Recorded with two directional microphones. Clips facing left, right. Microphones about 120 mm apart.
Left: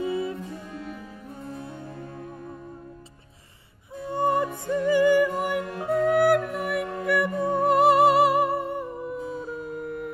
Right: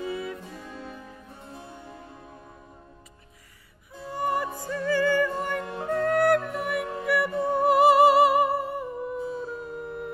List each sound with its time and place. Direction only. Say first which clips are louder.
0.0 s music: left 4 dB; 25° left (ahead or behind)
4.1 s music: left 4 dB; 25° left (ahead or behind); by 10.1 s centre (ahead or behind)